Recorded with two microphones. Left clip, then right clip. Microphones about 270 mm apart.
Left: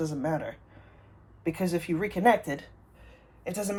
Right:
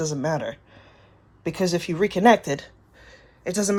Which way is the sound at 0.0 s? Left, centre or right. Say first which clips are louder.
Right 5 dB; right.